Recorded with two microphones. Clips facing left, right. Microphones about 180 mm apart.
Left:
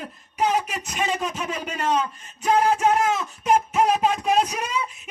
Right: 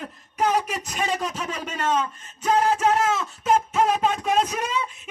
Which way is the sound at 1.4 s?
10° left (ahead or behind).